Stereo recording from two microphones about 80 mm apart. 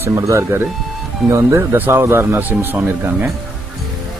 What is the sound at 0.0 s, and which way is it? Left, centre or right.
Speech, right.